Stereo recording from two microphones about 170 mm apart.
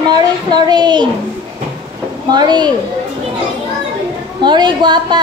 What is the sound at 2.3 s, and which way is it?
Speech, 25° right (ahead or behind).